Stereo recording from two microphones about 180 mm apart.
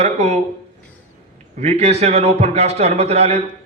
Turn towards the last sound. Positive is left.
turn(degrees=-35)  # may be behind; listen again after turning